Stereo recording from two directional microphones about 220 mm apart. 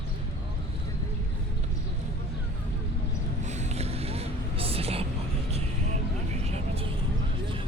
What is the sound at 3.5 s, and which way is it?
Boat, 30° right (ahead or behind).